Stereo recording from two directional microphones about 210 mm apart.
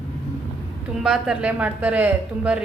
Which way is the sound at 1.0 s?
Centre (ahead or behind).